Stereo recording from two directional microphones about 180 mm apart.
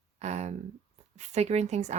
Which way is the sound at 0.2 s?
40° right (ahead or behind).